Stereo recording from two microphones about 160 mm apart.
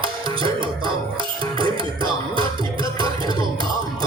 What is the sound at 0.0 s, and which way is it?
Music, 30° right (ahead or behind).